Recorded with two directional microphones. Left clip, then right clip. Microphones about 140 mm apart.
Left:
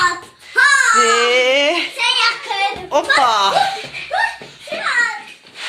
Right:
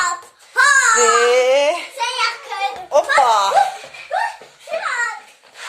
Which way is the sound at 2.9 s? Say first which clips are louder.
Right 1 dB; 20° right (ahead or behind).